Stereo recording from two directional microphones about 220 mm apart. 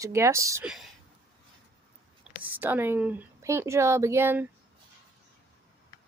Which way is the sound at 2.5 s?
10° right (ahead or behind).